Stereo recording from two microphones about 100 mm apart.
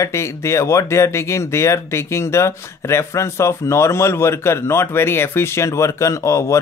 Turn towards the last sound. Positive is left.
turn(degrees=30)  # may be behind; listen again after turning